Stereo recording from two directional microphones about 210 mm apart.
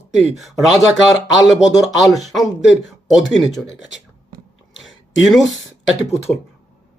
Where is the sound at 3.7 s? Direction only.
60° left (ahead or behind).